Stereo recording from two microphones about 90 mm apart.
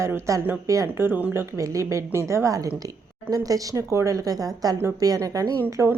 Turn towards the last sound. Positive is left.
turn(degrees=-35)  # may be behind; listen again after turning